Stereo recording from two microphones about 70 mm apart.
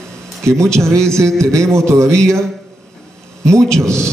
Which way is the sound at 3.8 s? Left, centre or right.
Right.